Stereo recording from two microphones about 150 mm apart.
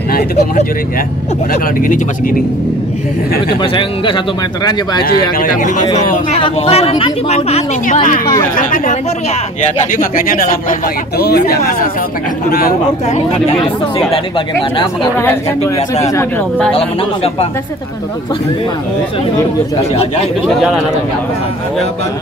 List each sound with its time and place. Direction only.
1.5 s speech: 65° left (ahead or behind)
3.6 s speech: 30° left (ahead or behind)
5.0 s speech: 65° left (ahead or behind)
6.4 s speech: 40° left (ahead or behind)
7.8 s a woman's voice: 60° left (ahead or behind)
9.9 s speech: 70° left (ahead or behind)
11.1 s speech: 90° left
12.4 s speech: 75° left (ahead or behind)
13.6 s speech: 35° left (ahead or behind)
15.1 s a man's voice: 15° left (ahead or behind)
16.7 s speech: 40° left (ahead or behind)